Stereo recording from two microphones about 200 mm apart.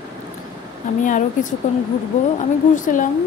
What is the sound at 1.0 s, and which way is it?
Speech, 40° left (ahead or behind).